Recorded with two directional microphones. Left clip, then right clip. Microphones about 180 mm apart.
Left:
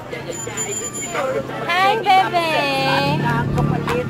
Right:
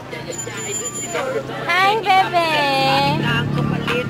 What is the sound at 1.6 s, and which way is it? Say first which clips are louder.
Speech: even; 20° right (ahead or behind).